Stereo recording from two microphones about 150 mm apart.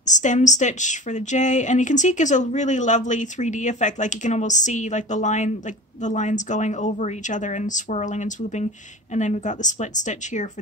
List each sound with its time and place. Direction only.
0.0 s speech: 55° left (ahead or behind)